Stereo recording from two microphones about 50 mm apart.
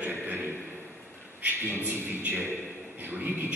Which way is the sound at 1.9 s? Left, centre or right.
Right.